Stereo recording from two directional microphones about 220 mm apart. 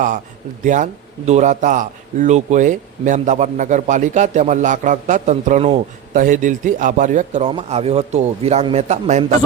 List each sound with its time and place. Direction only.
0.6 s a man's voice: 35° right (ahead or behind)